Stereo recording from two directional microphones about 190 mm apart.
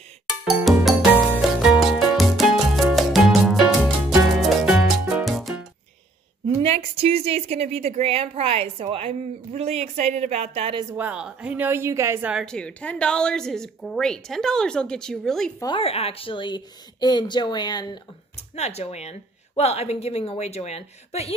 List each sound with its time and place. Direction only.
0.7 s music: centre (ahead or behind)
6.6 s a woman's voice: 30° right (ahead or behind)
10.9 s a woman's voice: 10° right (ahead or behind)
15.6 s speech: 30° left (ahead or behind)
18.5 s a woman's voice: 35° left (ahead or behind)